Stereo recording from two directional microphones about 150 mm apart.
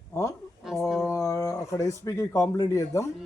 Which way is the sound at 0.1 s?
20° left (ahead or behind).